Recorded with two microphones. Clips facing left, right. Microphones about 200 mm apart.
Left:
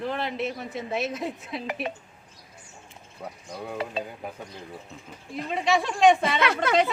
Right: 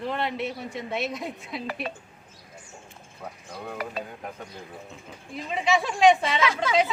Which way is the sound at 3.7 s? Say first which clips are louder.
Left 2 dB; 25° left (ahead or behind).